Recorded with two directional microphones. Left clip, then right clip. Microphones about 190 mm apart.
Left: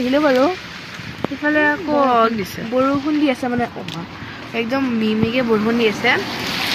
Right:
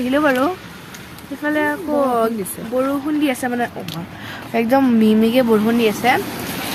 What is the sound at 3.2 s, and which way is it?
Speech, centre (ahead or behind).